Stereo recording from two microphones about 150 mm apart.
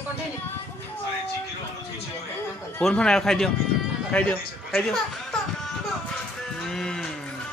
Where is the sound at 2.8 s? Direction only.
5° left (ahead or behind).